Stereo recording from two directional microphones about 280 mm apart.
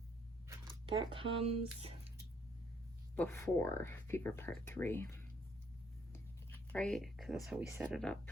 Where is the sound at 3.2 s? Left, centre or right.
Centre.